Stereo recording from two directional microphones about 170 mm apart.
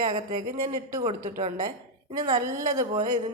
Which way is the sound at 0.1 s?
25° right (ahead or behind).